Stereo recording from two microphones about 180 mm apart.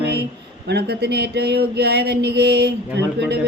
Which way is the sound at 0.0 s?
65° right (ahead or behind).